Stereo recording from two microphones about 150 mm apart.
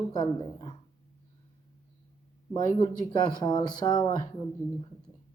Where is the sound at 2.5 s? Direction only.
30° left (ahead or behind).